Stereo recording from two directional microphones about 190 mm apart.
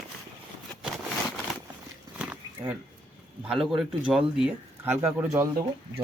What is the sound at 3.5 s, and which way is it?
Speech, centre (ahead or behind).